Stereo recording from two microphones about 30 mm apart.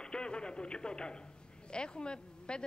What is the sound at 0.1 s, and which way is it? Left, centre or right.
Radio, left.